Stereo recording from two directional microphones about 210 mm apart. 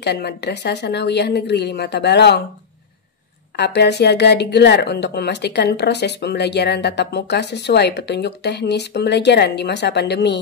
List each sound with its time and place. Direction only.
0.0 s speech: 50° left (ahead or behind)
3.5 s speech: 55° left (ahead or behind)